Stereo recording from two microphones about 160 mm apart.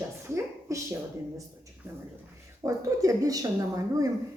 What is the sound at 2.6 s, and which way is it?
Speech, 20° right (ahead or behind).